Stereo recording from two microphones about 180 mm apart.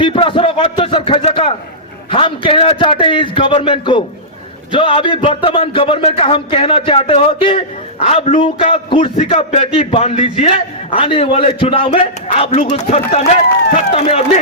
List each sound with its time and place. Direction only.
0.0 s a man's voice: 30° left (ahead or behind)